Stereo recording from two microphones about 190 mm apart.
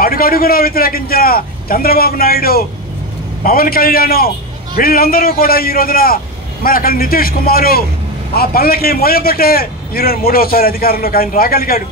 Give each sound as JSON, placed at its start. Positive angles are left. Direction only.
{"t": 0.0, "sound": "a man's voice", "side_deg": 50}